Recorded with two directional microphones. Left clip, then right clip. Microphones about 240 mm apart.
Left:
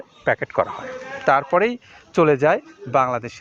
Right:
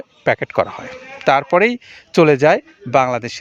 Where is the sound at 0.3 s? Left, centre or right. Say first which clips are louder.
Right 3 dB; right.